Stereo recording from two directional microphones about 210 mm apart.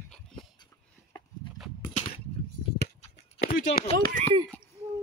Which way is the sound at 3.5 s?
40° left (ahead or behind).